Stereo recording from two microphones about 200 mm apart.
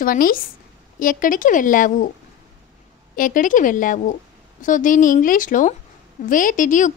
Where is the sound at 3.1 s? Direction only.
40° left (ahead or behind).